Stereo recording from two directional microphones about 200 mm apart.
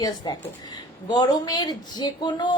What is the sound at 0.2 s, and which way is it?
A woman's voice, 20° left (ahead or behind).